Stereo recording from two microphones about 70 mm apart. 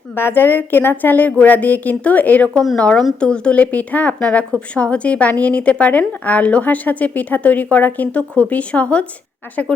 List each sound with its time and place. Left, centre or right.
0.2 s a woman's voice: left